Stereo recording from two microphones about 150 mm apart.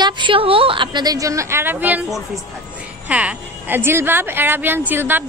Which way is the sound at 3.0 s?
10° right (ahead or behind).